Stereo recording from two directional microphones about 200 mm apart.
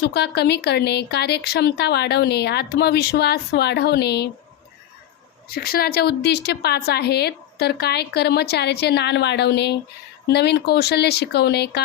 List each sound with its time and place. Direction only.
0.0 s speech: 55° left (ahead or behind)
5.5 s speech: 50° left (ahead or behind)